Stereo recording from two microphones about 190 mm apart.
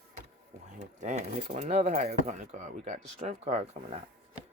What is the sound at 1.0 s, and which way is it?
Speech, 40° right (ahead or behind).